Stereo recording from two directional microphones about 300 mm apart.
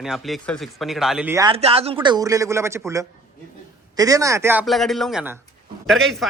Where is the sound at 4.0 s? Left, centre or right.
Centre.